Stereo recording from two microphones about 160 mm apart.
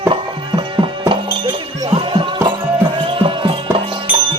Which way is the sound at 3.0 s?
35° right (ahead or behind).